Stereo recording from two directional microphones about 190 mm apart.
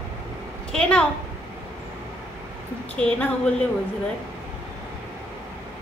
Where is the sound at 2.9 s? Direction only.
5° left (ahead or behind).